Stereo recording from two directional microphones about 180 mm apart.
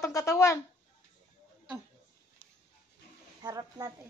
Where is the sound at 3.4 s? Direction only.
20° right (ahead or behind).